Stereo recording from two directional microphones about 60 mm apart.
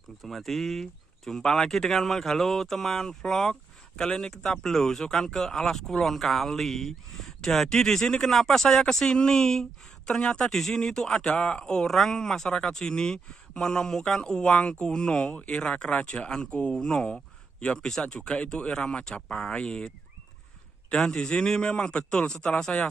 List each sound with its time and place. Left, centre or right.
0.2 s speech: centre
20.9 s speech: centre